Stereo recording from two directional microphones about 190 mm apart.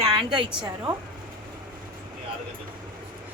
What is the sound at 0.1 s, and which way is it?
Speech, 25° right (ahead or behind).